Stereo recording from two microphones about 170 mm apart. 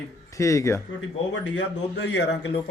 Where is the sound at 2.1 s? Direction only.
90° left.